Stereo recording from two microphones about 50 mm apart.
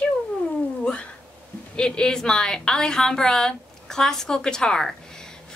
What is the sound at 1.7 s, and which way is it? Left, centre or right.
A woman's voice, centre.